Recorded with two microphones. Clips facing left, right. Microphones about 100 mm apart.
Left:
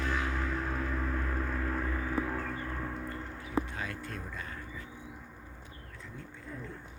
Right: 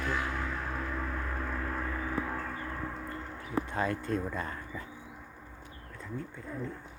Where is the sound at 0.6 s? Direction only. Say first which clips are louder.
Left 1 dB; 25° right (ahead or behind).